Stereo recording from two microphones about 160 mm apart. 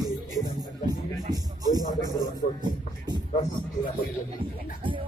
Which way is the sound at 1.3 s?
25° right (ahead or behind).